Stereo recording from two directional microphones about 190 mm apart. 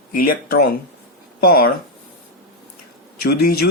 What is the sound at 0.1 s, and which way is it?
Speech, 50° left (ahead or behind).